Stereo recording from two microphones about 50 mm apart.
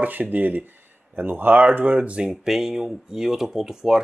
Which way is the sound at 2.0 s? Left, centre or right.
Right.